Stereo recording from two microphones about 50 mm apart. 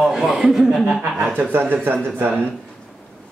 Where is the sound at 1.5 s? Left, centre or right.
Right.